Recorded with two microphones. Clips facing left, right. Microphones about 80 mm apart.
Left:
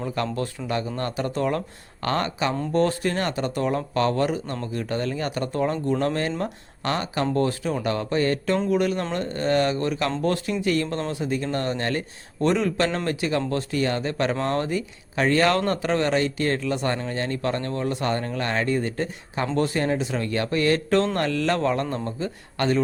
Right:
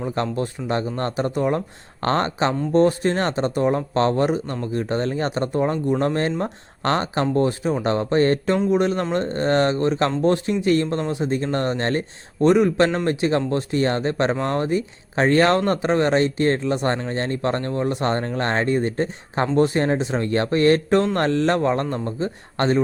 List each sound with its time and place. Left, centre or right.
0.0 s speech: right
2.0 s speech: right
6.8 s speech: right
8.5 s speech: right
12.4 s speech: right
20.9 s speech: centre
21.2 s speech: right